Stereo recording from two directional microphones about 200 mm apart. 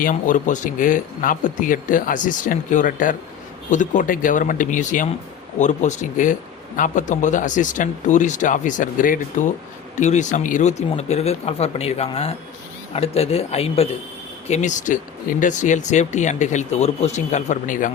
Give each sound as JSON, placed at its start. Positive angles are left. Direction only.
{"t": 0.0, "sound": "speech", "side_deg": 40}